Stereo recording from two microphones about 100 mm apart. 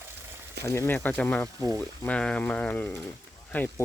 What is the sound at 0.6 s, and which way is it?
Speech, 25° left (ahead or behind).